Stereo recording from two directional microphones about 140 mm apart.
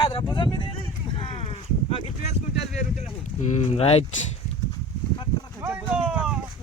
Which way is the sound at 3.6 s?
50° left (ahead or behind).